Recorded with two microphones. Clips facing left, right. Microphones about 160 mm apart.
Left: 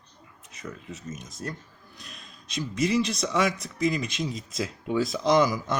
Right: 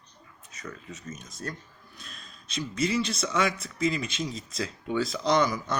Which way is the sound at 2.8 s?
20° left (ahead or behind).